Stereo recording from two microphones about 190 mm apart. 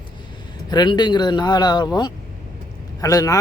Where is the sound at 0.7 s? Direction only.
25° left (ahead or behind).